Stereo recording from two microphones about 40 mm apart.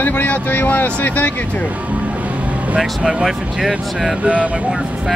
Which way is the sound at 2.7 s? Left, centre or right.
Centre.